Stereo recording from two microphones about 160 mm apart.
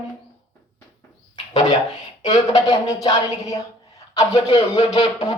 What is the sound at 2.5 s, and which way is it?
A man's voice, 20° left (ahead or behind).